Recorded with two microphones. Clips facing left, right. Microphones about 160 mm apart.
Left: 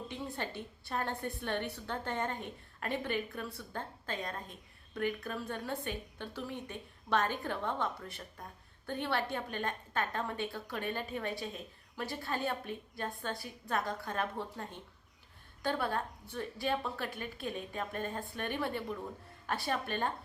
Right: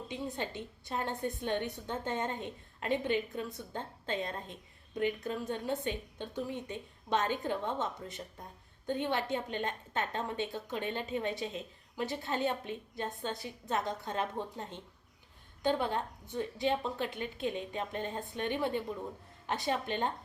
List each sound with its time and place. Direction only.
0.1 s a woman's voice: 20° right (ahead or behind)